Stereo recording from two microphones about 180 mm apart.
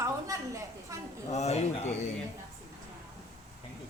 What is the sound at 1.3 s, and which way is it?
Speech, 35° left (ahead or behind).